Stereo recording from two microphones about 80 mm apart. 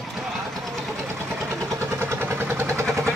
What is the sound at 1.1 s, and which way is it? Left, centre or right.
Vehicle, right.